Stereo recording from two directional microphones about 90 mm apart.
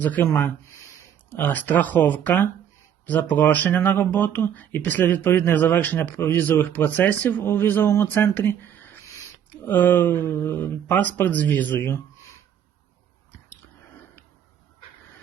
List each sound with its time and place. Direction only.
0.0 s speech: 20° left (ahead or behind)